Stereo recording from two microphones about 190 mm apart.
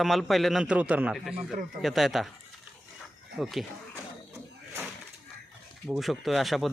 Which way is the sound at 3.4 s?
Centre (ahead or behind).